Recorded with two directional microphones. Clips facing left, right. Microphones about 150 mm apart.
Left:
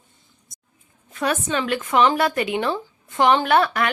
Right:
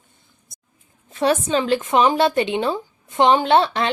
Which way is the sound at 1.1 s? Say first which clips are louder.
Right 5 dB; 25° right (ahead or behind).